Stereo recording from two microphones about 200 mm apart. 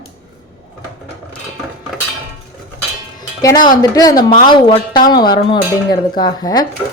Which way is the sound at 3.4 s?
20° left (ahead or behind).